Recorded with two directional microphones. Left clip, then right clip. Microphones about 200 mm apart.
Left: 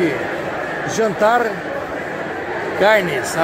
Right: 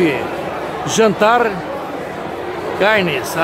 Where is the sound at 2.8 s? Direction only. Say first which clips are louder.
Even; 10° right (ahead or behind).